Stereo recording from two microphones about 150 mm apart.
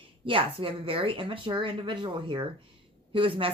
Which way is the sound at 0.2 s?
35° right (ahead or behind).